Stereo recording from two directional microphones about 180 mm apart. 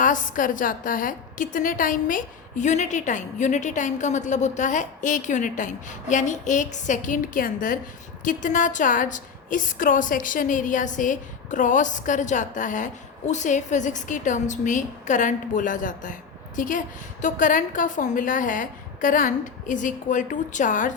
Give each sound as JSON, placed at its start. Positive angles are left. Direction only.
{"t": 0.0, "sound": "a woman's voice", "side_deg": 45}